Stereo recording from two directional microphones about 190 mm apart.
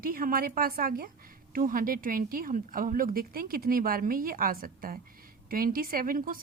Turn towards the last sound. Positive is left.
turn(degrees=-50)  # may be behind; listen again after turning